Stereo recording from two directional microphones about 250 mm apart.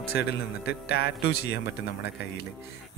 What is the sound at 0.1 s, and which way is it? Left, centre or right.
A man's voice, left.